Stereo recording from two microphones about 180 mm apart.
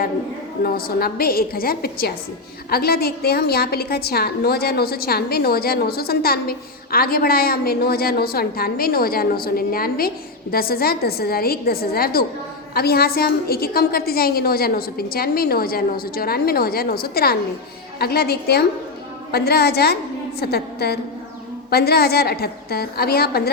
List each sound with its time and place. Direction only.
0.6 s a woman's voice: 55° left (ahead or behind)